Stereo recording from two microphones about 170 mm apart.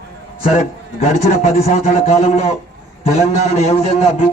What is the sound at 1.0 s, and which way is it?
A man's voice, 45° left (ahead or behind).